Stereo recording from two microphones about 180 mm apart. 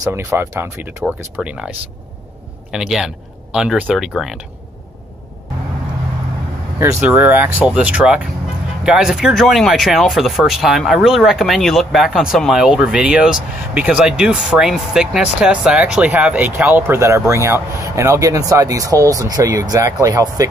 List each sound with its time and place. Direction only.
0.0 s speech: 15° right (ahead or behind)
2.7 s speech: 5° right (ahead or behind)
6.8 s speech: 10° right (ahead or behind)